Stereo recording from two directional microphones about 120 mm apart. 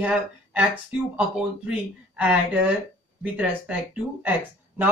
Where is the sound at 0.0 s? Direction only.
10° right (ahead or behind).